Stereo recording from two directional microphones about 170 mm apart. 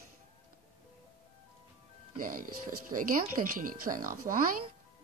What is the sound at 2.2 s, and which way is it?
Speech, 55° right (ahead or behind).